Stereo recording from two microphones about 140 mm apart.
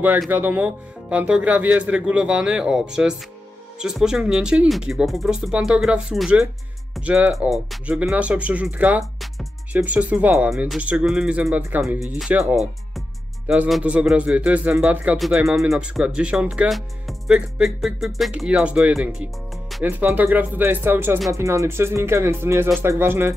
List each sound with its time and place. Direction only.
0.3 s speech: 10° right (ahead or behind)
13.5 s speech: 5° right (ahead or behind)